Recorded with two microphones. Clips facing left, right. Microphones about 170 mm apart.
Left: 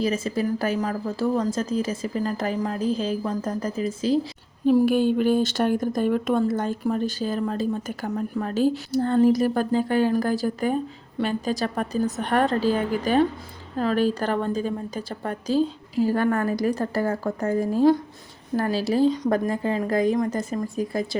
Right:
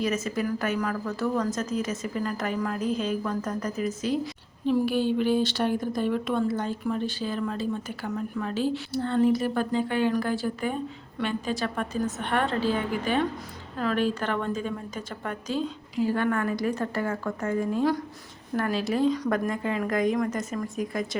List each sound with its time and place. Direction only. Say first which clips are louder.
0.0 s a woman's voice: left 3 dB; 30° left (ahead or behind)
4.6 s a woman's voice: left 5 dB; 45° left (ahead or behind)